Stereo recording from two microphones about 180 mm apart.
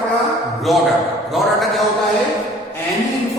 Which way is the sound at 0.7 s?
Centre (ahead or behind).